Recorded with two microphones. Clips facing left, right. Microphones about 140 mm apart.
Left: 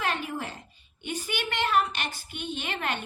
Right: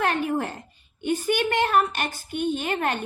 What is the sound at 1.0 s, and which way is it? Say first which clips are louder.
A woman's voice: right 10 dB; 50° right (ahead or behind).